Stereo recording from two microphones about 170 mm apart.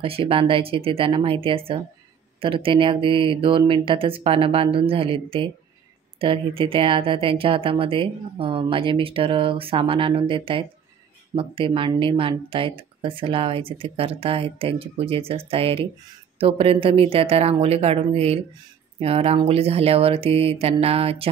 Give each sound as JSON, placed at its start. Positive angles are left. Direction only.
{"t": 0.0, "sound": "speech", "side_deg": -35}